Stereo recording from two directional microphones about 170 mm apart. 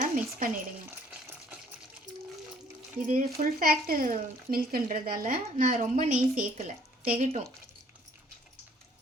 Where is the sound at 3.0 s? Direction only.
50° right (ahead or behind).